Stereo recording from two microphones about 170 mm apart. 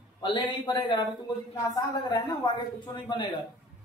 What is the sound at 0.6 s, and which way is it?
Speech, 30° left (ahead or behind).